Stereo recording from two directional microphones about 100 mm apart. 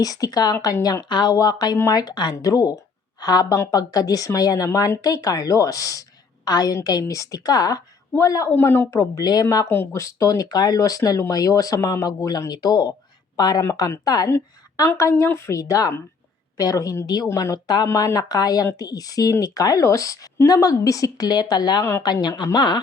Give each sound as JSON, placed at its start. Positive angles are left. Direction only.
{"t": 0.0, "sound": "a woman's voice", "side_deg": 40}
{"t": 8.5, "sound": "a woman's voice", "side_deg": 20}
{"t": 9.2, "sound": "a woman's voice", "side_deg": 40}